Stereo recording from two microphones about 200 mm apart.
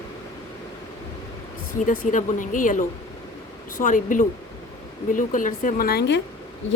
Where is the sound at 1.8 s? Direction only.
40° left (ahead or behind); by 6.2 s 55° left (ahead or behind).